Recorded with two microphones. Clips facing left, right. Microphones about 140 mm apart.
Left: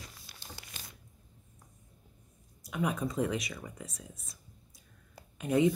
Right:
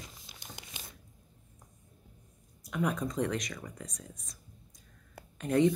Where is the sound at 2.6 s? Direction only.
Centre (ahead or behind).